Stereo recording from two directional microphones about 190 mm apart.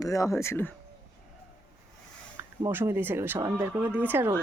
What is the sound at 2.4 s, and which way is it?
Speech, 10° right (ahead or behind).